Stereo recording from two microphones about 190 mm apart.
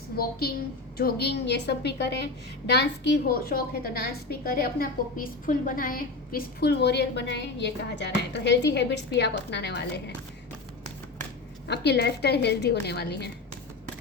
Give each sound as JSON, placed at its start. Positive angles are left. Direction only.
{"t": 0.2, "sound": "a woman's voice", "side_deg": 55}
{"t": 11.7, "sound": "a woman's voice", "side_deg": 60}